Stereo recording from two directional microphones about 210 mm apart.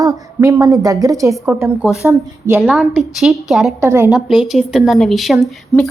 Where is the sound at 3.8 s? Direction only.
10° right (ahead or behind).